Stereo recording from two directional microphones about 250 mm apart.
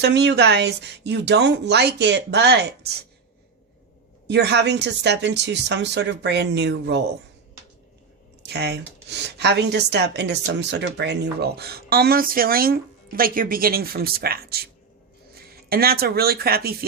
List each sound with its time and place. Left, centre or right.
0.0 s speech: right
4.3 s speech: right
8.4 s speech: right